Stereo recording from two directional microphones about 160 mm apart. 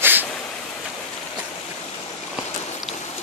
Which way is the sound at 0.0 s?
10° right (ahead or behind).